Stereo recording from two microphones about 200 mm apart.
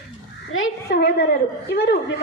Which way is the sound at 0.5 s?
65° left (ahead or behind).